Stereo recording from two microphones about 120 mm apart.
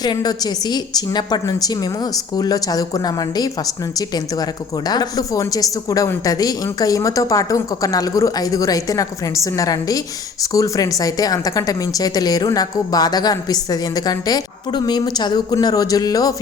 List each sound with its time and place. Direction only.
0.0 s a woman's voice: 35° left (ahead or behind)